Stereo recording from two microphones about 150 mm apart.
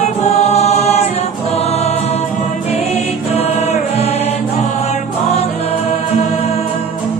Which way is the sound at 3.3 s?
45° left (ahead or behind).